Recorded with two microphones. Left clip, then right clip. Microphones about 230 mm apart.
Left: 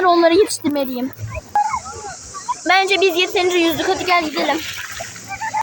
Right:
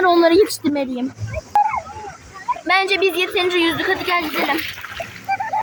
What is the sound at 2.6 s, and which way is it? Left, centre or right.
Speech, centre.